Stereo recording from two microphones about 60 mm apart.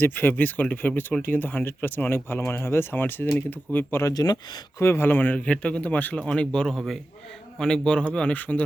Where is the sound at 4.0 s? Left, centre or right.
Left.